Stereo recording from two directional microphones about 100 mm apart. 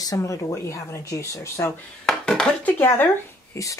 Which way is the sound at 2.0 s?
5° left (ahead or behind).